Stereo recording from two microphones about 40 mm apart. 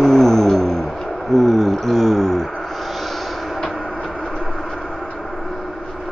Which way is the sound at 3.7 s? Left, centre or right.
Left.